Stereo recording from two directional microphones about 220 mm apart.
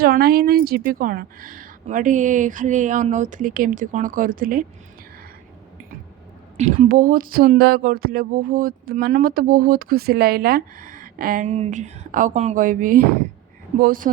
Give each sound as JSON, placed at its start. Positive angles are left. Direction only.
{"t": 0.0, "sound": "speech", "side_deg": -45}
{"t": 6.6, "sound": "speech", "side_deg": -35}